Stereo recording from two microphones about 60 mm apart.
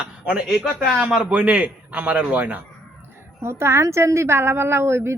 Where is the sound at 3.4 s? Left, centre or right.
Right.